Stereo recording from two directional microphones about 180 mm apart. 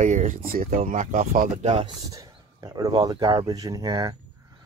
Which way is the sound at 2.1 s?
20° right (ahead or behind).